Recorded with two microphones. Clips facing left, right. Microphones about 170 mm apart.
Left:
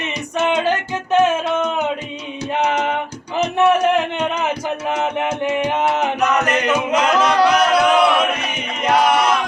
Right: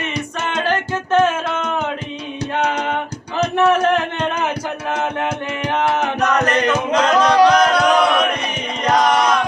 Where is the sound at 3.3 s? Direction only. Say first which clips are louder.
Even; 15° left (ahead or behind).